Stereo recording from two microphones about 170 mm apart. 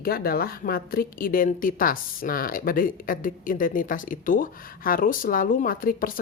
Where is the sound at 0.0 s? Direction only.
60° left (ahead or behind).